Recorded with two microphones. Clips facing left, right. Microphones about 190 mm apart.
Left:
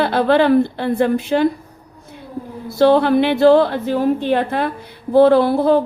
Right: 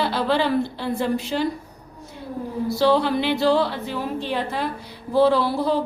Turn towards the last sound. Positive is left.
turn(degrees=55)  # may be behind; listen again after turning